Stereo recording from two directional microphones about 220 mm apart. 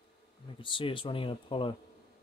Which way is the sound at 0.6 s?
20° left (ahead or behind).